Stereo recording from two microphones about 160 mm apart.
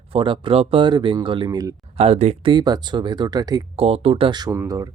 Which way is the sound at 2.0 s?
40° right (ahead or behind).